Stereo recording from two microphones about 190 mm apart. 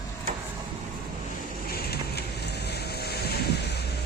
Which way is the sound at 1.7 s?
55° left (ahead or behind).